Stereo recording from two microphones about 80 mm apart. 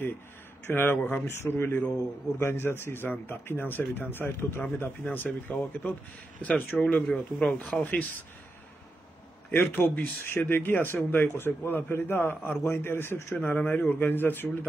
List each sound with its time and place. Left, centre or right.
0.7 s a man's voice: left
7.1 s speech: centre
7.8 s a man's voice: left
9.5 s a man's voice: left